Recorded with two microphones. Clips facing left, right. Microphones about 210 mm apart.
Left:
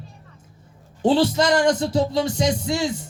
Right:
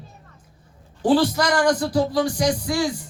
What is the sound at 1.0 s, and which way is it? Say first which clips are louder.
Speech: left 1 dB; 25° left (ahead or behind).